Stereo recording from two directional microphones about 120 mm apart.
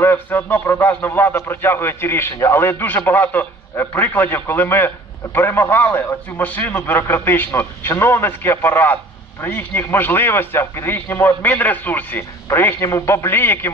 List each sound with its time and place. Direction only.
0.0 s a man's voice: 20° left (ahead or behind)